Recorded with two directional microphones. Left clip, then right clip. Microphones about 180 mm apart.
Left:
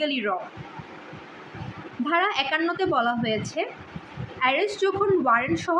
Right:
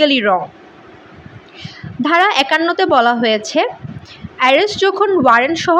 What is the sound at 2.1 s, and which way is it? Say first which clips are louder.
A woman's voice: right 11 dB; 50° right (ahead or behind).